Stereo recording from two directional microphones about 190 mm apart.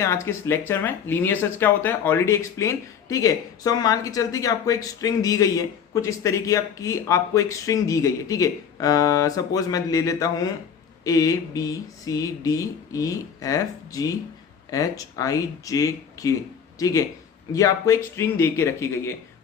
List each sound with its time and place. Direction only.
0.0 s speech: 15° left (ahead or behind)